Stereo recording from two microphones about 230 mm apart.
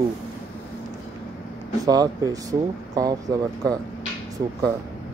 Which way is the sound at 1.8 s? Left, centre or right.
Centre.